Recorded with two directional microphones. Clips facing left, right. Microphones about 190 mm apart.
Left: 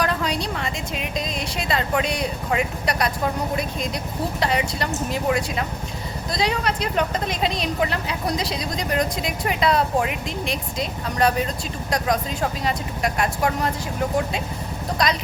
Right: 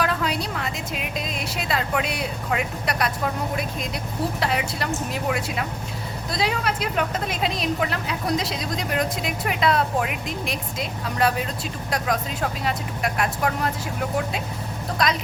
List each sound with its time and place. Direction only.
0.0 s a sound: 5° right (ahead or behind)
4.4 s speech: centre (ahead or behind)
12.6 s speech: centre (ahead or behind)
15.0 s speech: centre (ahead or behind)